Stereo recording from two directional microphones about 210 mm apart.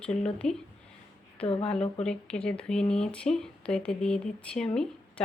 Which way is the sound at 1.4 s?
25° left (ahead or behind).